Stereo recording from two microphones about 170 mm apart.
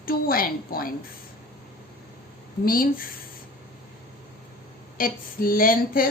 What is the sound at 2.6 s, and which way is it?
Speech, 60° left (ahead or behind).